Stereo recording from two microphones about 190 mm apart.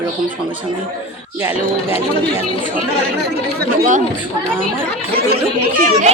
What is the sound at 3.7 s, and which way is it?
Speech, 40° right (ahead or behind).